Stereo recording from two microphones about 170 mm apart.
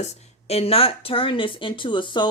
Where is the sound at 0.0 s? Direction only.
40° left (ahead or behind).